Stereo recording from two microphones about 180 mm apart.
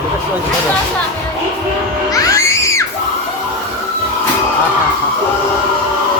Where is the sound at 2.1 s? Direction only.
20° left (ahead or behind).